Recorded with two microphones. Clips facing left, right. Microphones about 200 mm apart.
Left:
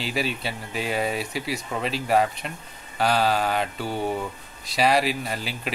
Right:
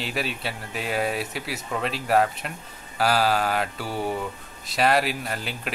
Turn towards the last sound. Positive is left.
turn(degrees=0)  # may be behind; listen again after turning